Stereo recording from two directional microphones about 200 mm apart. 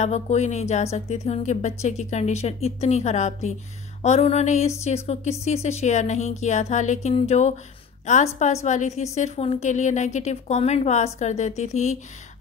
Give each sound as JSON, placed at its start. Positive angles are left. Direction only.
{"t": 0.0, "sound": "a woman's voice", "side_deg": 35}